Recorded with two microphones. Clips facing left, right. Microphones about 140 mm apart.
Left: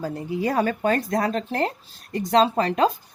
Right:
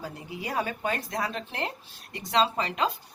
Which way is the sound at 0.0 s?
45° left (ahead or behind).